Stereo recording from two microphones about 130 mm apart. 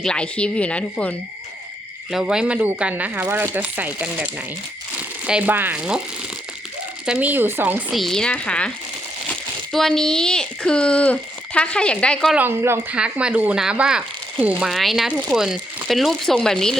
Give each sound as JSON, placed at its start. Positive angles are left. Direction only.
{"t": 0.0, "sound": "speech", "side_deg": 5}
{"t": 2.0, "sound": "speech", "side_deg": -5}
{"t": 7.0, "sound": "speech", "side_deg": -10}
{"t": 7.9, "sound": "speech", "side_deg": 5}
{"t": 9.7, "sound": "speech", "side_deg": 5}
{"t": 12.3, "sound": "speech", "side_deg": -15}